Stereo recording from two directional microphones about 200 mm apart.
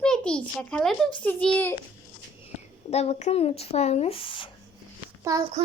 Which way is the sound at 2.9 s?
30° left (ahead or behind).